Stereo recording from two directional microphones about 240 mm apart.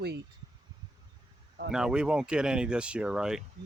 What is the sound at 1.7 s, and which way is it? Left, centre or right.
Speech, centre.